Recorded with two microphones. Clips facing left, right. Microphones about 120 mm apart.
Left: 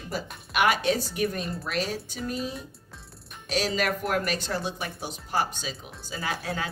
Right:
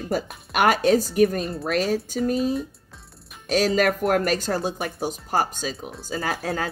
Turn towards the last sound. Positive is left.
turn(degrees=-45)  # may be behind; listen again after turning